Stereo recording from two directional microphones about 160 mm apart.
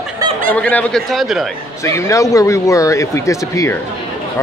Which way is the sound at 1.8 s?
20° left (ahead or behind).